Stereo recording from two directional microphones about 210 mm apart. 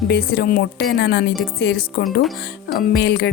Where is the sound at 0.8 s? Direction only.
60° left (ahead or behind).